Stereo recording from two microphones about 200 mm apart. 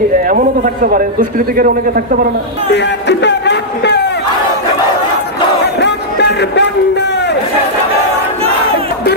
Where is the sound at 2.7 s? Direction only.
60° left (ahead or behind).